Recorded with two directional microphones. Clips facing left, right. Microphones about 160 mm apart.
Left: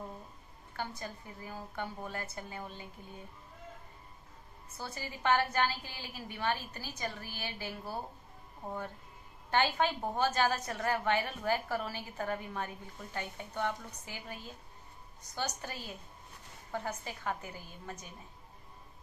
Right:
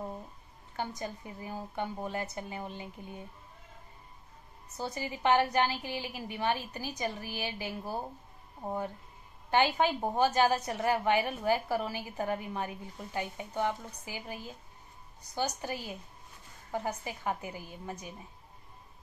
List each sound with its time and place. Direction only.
0.7 s a woman's voice: 20° right (ahead or behind)
4.7 s a woman's voice: 15° right (ahead or behind)